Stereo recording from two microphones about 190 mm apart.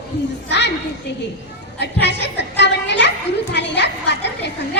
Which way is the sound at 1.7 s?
65° left (ahead or behind).